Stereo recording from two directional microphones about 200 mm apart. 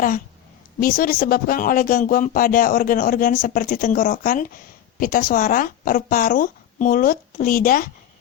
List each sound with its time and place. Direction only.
0.8 s speech: 45° left (ahead or behind)